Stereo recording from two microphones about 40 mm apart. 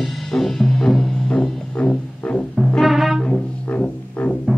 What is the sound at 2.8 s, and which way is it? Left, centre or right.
Music, centre.